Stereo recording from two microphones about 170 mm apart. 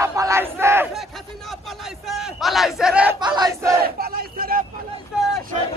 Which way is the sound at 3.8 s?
60° right (ahead or behind).